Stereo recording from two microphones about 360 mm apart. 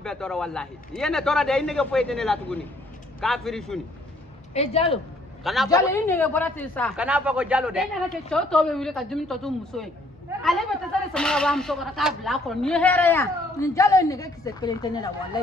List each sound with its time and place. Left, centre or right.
0.0 s speech: centre
4.6 s a man's voice: centre
5.4 s speech: centre